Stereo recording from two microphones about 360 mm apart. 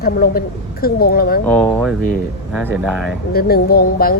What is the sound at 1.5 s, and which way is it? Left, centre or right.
Speech, centre.